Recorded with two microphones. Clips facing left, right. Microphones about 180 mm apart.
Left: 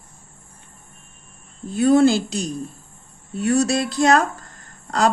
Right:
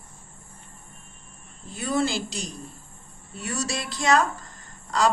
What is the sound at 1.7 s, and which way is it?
A woman's voice, 60° left (ahead or behind).